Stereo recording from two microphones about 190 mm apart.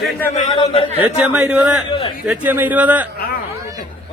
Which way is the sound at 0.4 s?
30° left (ahead or behind).